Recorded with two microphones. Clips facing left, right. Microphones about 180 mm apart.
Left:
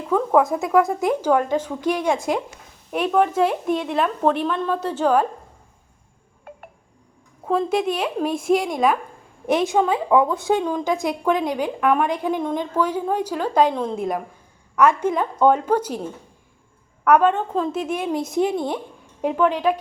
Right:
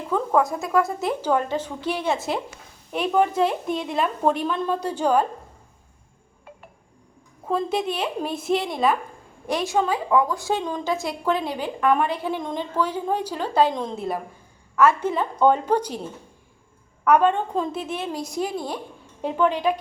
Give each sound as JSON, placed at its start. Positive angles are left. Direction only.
{"t": 0.5, "sound": "speech", "side_deg": 20}
{"t": 2.9, "sound": "a woman's voice", "side_deg": 0}
{"t": 7.4, "sound": "a woman's voice", "side_deg": 10}
{"t": 17.0, "sound": "a woman's voice", "side_deg": 5}
{"t": 18.1, "sound": "a woman's voice", "side_deg": 20}
{"t": 19.2, "sound": "speech", "side_deg": 10}